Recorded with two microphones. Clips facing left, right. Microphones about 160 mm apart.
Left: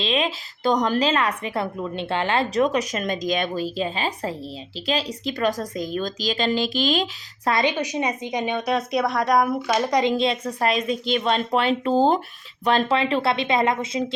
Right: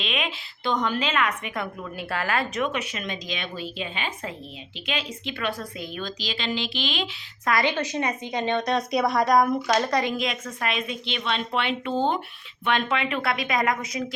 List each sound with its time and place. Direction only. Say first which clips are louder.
0.0 s a woman's voice: left 6 dB; 35° left (ahead or behind)
7.5 s a woman's voice: left 1 dB; 15° left (ahead or behind)